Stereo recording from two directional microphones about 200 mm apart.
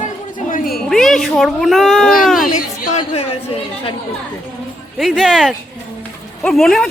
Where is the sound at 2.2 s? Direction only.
Centre (ahead or behind).